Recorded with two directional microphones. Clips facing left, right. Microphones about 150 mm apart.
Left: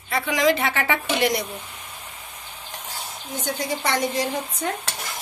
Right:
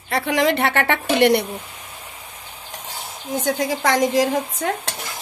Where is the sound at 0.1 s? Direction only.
65° right (ahead or behind).